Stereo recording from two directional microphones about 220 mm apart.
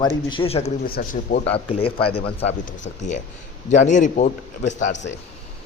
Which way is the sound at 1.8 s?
25° left (ahead or behind).